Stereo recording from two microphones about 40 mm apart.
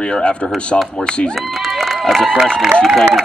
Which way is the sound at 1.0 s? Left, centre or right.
Left.